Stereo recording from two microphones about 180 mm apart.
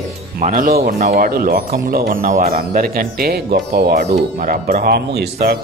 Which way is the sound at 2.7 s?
55° right (ahead or behind).